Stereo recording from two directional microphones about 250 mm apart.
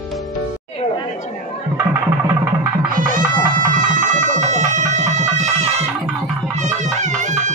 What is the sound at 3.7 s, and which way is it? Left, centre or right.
Music, right.